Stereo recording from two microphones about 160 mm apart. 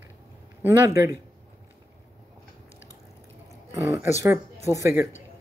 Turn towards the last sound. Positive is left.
turn(degrees=-20)  # may be behind; listen again after turning